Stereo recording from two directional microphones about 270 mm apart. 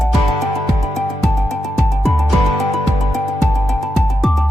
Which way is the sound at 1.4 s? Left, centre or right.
Centre.